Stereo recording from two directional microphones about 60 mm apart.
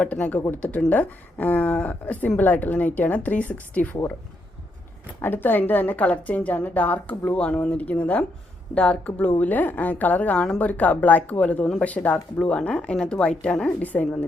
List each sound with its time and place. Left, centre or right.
0.0 s speech: left
5.2 s a woman's voice: left